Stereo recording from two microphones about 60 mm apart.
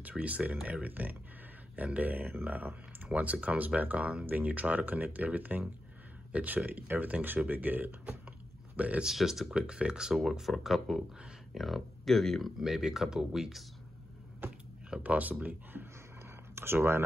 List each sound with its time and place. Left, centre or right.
0.0 s speech: right
9.0 s speech: centre
9.6 s speech: centre
14.9 s speech: right